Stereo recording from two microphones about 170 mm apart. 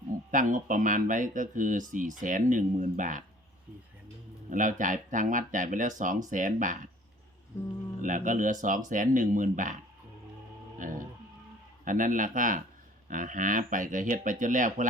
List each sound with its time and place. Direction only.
0.3 s speech: 50° right (ahead or behind)
4.5 s speech: 50° right (ahead or behind)
8.0 s speech: 50° right (ahead or behind)
10.8 s music: 50° right (ahead or behind)
11.9 s speech: 50° right (ahead or behind)